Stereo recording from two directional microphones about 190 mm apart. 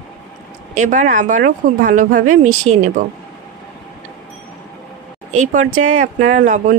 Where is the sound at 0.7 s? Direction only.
40° right (ahead or behind).